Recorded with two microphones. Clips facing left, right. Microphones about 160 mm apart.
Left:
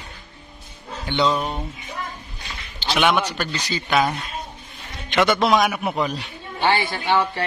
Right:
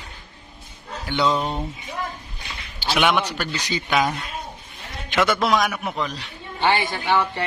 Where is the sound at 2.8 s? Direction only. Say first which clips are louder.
Left 1 dB; 10° right (ahead or behind).